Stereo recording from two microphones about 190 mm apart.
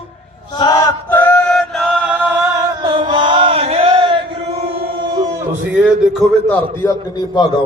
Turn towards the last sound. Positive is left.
turn(degrees=20)  # may be behind; listen again after turning